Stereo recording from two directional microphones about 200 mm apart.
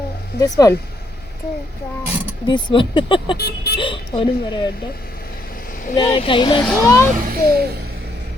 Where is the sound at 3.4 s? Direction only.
50° left (ahead or behind).